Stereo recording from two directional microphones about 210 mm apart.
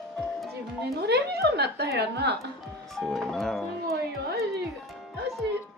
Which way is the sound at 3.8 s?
50° right (ahead or behind).